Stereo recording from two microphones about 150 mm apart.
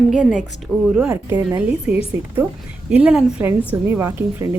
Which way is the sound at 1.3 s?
25° right (ahead or behind).